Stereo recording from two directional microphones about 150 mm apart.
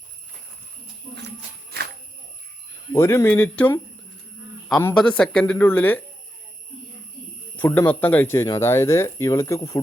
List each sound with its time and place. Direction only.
2.9 s speech: 15° left (ahead or behind)
4.9 s speech: 5° left (ahead or behind)
7.5 s speech: 10° left (ahead or behind)